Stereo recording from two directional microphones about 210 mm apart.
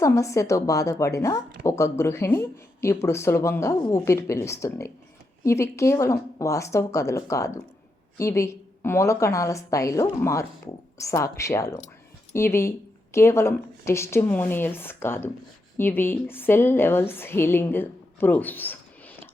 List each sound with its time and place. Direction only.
0.0 s a woman's voice: 15° left (ahead or behind)